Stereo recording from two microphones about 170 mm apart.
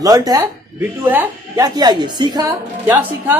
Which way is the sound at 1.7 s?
25° right (ahead or behind).